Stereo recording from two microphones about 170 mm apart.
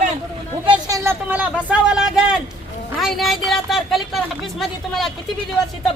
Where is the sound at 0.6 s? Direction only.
25° right (ahead or behind).